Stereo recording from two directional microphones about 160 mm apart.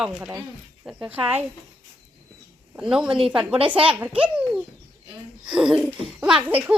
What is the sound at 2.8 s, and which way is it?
Speech, 5° right (ahead or behind).